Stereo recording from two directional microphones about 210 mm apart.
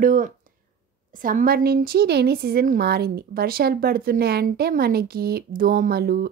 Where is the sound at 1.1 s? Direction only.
40° right (ahead or behind).